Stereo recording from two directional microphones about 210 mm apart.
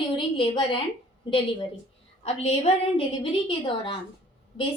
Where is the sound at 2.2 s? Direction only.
30° left (ahead or behind).